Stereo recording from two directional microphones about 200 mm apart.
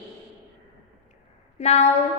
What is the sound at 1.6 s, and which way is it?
Speech, 35° left (ahead or behind).